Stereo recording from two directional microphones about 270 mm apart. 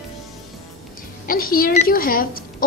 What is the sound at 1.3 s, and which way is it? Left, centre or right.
A woman's voice, left.